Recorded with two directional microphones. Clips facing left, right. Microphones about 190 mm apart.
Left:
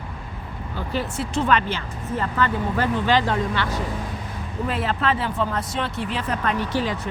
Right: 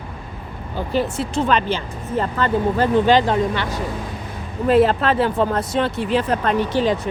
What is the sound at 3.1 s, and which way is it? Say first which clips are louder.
Speech: right 5 dB; 20° right (ahead or behind).